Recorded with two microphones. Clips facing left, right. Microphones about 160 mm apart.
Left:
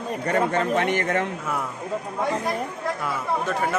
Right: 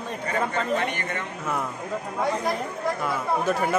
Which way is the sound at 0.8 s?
85° left.